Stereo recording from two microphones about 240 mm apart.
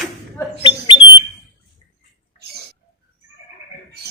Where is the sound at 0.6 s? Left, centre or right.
Centre.